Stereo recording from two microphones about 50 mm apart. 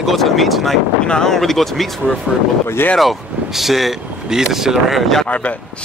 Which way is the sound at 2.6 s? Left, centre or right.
Left.